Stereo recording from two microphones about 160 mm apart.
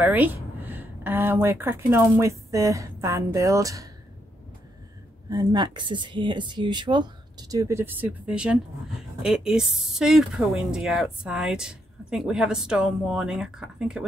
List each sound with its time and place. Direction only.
0.0 s a woman's voice: 10° right (ahead or behind)
5.3 s speech: 25° right (ahead or behind); by 14.0 s 5° right (ahead or behind)